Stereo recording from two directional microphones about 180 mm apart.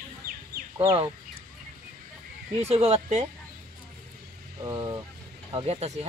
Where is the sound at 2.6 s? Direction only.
35° right (ahead or behind).